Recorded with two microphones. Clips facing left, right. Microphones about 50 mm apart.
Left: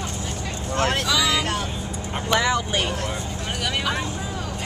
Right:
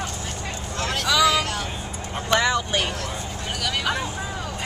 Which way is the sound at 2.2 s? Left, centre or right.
Centre.